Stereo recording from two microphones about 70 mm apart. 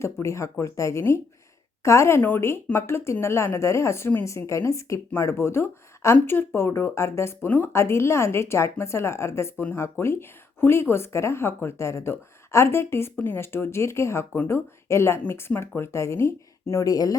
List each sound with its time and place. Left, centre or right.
0.0 s speech: left
7.4 s speech: left
7.7 s speech: left
16.8 s speech: left